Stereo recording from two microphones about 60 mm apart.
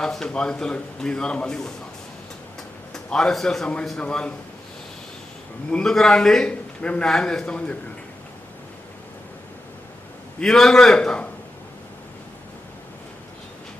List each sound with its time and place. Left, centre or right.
0.0 s a man's voice: centre
2.9 s a man's voice: centre
5.7 s a man's voice: centre
10.4 s a man's voice: centre